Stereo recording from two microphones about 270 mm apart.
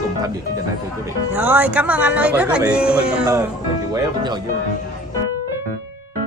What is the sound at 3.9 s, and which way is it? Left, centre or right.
Speech, centre.